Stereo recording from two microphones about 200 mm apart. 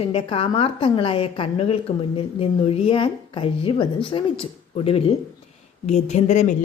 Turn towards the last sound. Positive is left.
turn(degrees=35)  # may be behind; listen again after turning